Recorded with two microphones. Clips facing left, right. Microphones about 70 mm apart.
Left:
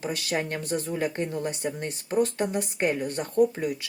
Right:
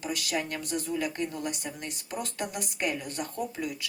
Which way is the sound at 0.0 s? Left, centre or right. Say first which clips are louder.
Left 3 dB; left.